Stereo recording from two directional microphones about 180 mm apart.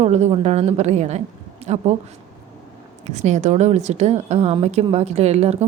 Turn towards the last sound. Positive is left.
turn(degrees=-35)  # may be behind; listen again after turning